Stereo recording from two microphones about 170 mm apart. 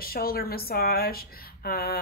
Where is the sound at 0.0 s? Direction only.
60° left (ahead or behind).